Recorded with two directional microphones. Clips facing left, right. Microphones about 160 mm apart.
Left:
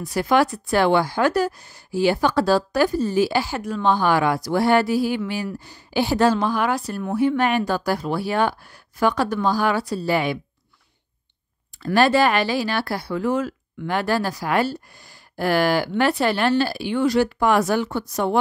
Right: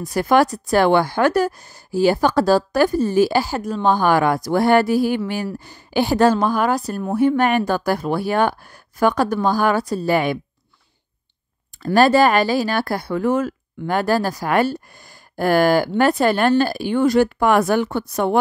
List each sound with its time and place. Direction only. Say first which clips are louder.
0.0 s a woman's voice: right 3 dB; 45° right (ahead or behind)
11.8 s a woman's voice: right 3 dB; 45° right (ahead or behind)